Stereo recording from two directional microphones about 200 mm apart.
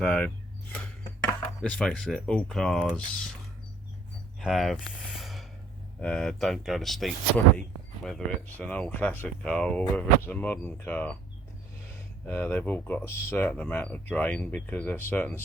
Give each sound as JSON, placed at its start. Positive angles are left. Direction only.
{"t": 0.0, "sound": "speech", "side_deg": 5}
{"t": 4.4, "sound": "speech", "side_deg": 0}
{"t": 12.3, "sound": "speech", "side_deg": 10}